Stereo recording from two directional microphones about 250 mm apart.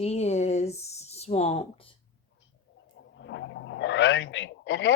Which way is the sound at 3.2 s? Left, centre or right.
Left.